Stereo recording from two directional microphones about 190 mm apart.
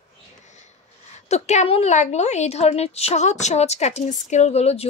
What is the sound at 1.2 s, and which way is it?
A woman's voice, 35° left (ahead or behind).